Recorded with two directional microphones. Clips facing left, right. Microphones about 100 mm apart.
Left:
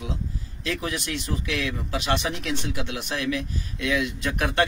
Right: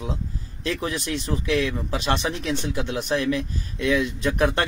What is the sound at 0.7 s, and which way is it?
Speech, 35° right (ahead or behind).